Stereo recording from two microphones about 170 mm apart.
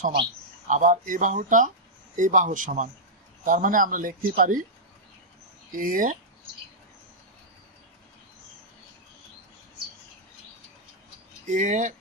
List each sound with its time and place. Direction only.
0.7 s speech: 50° right (ahead or behind)
5.7 s speech: 55° right (ahead or behind)
11.4 s speech: 50° right (ahead or behind)